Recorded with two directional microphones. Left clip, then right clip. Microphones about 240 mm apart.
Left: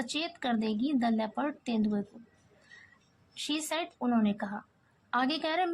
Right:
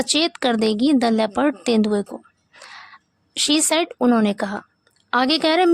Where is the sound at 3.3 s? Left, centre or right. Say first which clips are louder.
Right 15 dB; right.